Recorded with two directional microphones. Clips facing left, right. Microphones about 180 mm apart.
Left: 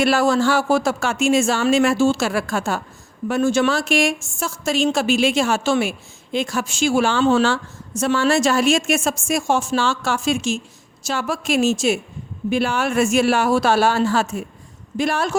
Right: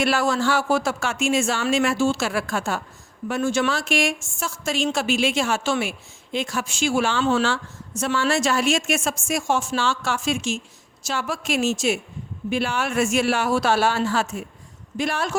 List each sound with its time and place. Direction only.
0.0 s a woman's voice: 35° left (ahead or behind)